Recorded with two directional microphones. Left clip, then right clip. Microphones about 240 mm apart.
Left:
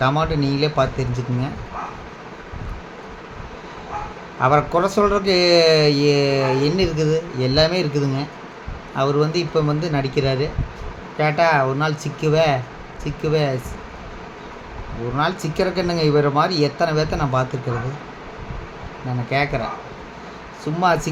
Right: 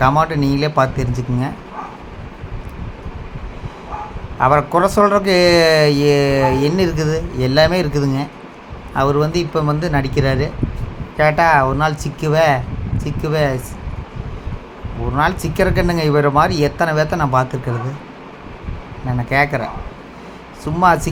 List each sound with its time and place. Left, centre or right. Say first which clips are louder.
0.0 s speech: right 5 dB; centre
4.4 s speech: right 4 dB; centre
15.1 s speech: right 4 dB; centre
19.3 s speech: right 5 dB; centre
20.8 s speech: right 5 dB; centre